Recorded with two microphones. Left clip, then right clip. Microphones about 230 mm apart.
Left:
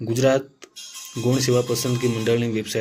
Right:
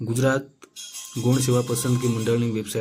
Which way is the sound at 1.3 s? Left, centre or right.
Right.